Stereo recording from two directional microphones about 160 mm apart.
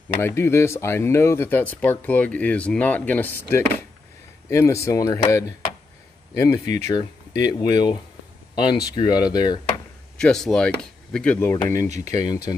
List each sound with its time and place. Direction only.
0.2 s speech: 15° left (ahead or behind)
10.1 s speech: 5° left (ahead or behind); by 12.5 s 20° left (ahead or behind)